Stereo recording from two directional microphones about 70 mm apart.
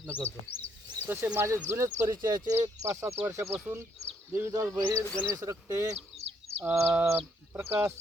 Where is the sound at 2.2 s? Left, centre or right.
Right.